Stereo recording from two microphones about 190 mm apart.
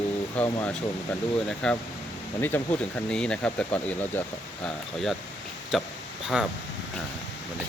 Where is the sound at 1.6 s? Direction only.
5° left (ahead or behind).